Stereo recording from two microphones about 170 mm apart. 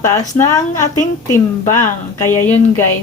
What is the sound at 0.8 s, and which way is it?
Speech, 50° left (ahead or behind).